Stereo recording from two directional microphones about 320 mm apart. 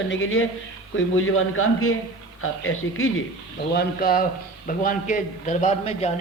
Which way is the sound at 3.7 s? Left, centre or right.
Left.